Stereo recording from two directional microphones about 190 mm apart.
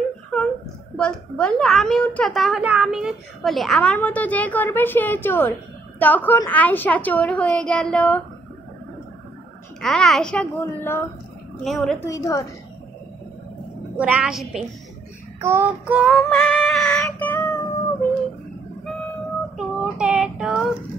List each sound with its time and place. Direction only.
0.3 s whimper: centre (ahead or behind)
0.9 s a woman's voice: 5° left (ahead or behind)
9.8 s a woman's voice: centre (ahead or behind)
12.1 s a woman's voice: 15° left (ahead or behind)
13.9 s a woman's voice: 5° right (ahead or behind)
15.4 s child singing: 10° right (ahead or behind)
16.1 s music: 5° left (ahead or behind)
19.5 s child singing: 5° right (ahead or behind)